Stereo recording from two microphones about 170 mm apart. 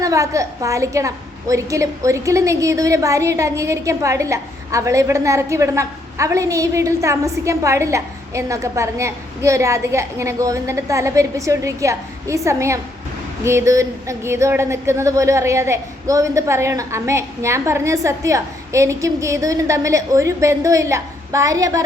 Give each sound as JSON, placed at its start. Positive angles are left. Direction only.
{"t": 0.0, "sound": "a woman's voice", "side_deg": -20}